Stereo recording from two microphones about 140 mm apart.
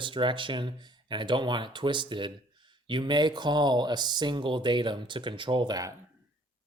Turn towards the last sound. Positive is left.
turn(degrees=-30)  # may be behind; listen again after turning